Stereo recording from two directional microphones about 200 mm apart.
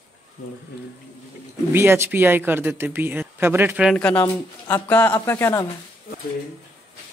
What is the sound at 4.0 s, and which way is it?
Speech, 5° left (ahead or behind).